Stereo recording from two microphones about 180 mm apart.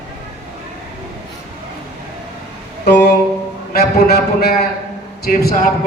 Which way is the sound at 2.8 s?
65° left (ahead or behind).